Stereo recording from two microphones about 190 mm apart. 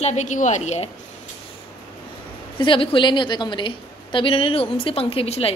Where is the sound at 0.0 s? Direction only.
40° left (ahead or behind).